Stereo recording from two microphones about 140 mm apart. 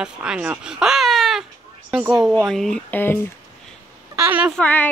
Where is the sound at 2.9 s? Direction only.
15° left (ahead or behind).